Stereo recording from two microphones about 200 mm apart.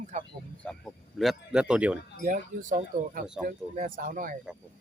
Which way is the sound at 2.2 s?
40° right (ahead or behind).